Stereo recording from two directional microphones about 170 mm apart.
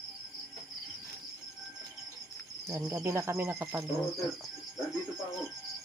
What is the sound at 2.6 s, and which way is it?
Speech, 15° right (ahead or behind).